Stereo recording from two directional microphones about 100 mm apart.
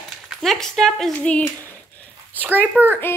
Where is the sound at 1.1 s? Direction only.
15° left (ahead or behind).